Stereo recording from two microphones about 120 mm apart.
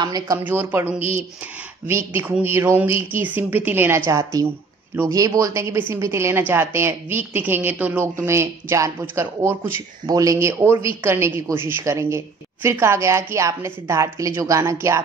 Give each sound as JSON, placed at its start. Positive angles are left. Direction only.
{"t": 0.0, "sound": "speech", "side_deg": -30}
{"t": 0.4, "sound": "a woman's voice", "side_deg": -15}
{"t": 1.9, "sound": "a woman's voice", "side_deg": -20}